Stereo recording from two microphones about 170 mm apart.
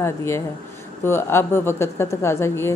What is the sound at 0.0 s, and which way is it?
A woman's voice, 15° left (ahead or behind).